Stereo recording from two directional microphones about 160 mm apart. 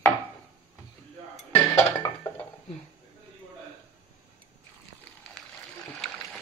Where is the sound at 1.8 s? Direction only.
20° left (ahead or behind).